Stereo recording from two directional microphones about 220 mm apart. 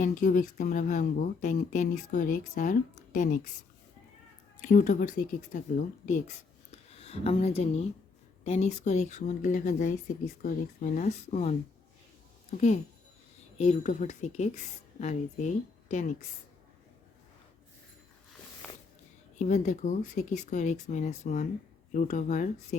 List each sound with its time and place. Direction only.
0.0 s speech: 35° left (ahead or behind)
4.6 s speech: 35° left (ahead or behind)
18.6 s a sound: 5° left (ahead or behind)
19.4 s speech: 30° left (ahead or behind)